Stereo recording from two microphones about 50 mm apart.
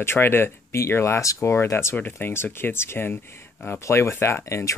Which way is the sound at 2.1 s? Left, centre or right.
Left.